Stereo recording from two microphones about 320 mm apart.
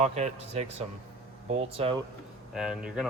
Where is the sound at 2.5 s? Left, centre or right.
Centre.